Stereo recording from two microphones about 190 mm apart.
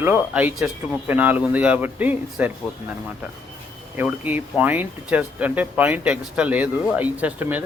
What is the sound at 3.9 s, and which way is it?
Speech, 10° right (ahead or behind).